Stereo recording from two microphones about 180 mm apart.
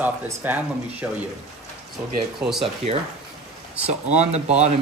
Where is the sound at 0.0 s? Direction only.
10° right (ahead or behind).